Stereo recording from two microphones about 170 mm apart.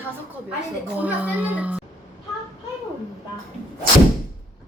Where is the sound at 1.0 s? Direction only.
10° right (ahead or behind).